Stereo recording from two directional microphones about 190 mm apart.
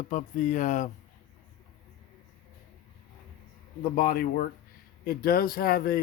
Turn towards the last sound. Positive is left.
turn(degrees=50)  # may be behind; listen again after turning